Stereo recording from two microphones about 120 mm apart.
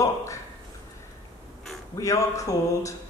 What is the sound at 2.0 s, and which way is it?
Speech, 25° left (ahead or behind).